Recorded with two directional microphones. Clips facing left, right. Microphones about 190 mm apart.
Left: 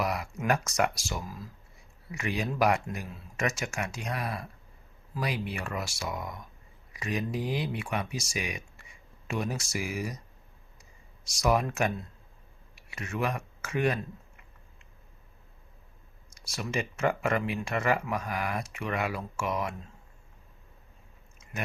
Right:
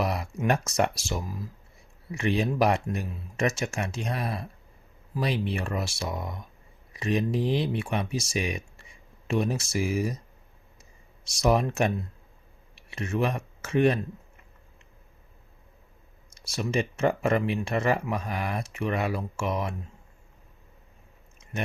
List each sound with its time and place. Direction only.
0.0 s speech: 30° right (ahead or behind)
11.3 s speech: 25° right (ahead or behind)
16.3 s speech: 25° right (ahead or behind)